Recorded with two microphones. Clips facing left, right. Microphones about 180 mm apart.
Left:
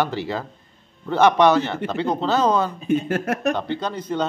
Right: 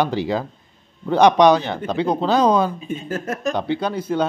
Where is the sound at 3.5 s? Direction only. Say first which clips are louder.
Right 3 dB; 10° right (ahead or behind).